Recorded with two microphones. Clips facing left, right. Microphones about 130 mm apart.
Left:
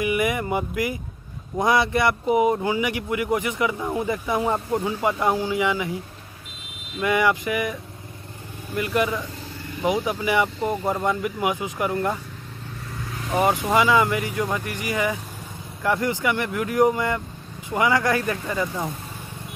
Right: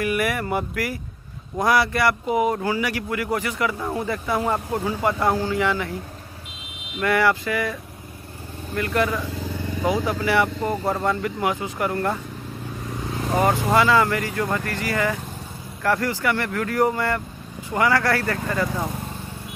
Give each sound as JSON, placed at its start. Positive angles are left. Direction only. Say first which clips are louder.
{"t": 0.0, "sound": "a man's voice", "louder": "even", "side_deg": 20}
{"t": 7.0, "sound": "a man's voice", "louder": "right 1 dB", "side_deg": 15}
{"t": 8.7, "sound": "a man's voice", "louder": "even", "side_deg": 15}
{"t": 13.7, "sound": "a man's voice", "louder": "right 1 dB", "side_deg": 15}